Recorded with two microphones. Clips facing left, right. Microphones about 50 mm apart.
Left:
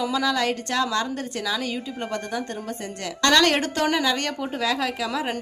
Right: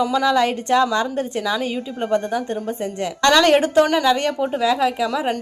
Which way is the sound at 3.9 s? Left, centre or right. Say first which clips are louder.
Right 6 dB; centre.